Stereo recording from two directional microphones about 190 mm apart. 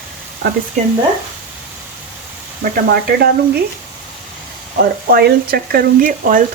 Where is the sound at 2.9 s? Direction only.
55° right (ahead or behind).